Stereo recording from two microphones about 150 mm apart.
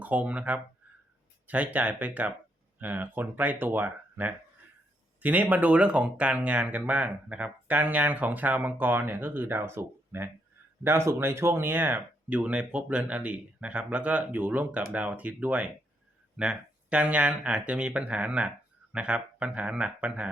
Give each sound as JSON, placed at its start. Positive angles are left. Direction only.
{"t": 0.0, "sound": "speech", "side_deg": -10}